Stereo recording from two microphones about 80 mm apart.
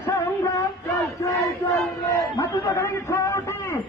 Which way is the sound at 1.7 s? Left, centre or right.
Left.